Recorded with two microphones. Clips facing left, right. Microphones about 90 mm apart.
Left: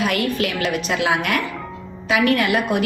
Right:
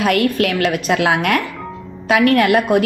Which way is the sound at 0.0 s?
55° right (ahead or behind).